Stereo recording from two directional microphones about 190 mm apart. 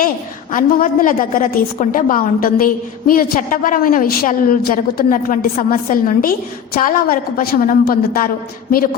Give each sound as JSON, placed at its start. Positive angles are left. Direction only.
{"t": 0.5, "sound": "a woman's voice", "side_deg": 45}